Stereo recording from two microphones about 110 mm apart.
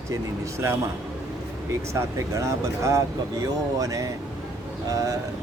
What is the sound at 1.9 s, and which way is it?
A man's voice, 25° right (ahead or behind).